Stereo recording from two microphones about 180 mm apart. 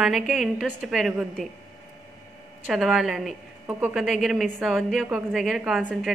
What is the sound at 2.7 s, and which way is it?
A woman's voice, centre (ahead or behind).